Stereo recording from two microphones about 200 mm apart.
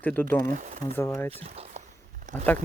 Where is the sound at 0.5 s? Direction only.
40° right (ahead or behind).